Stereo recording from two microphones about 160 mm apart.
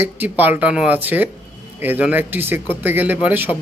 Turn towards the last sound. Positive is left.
turn(degrees=-10)  # may be behind; listen again after turning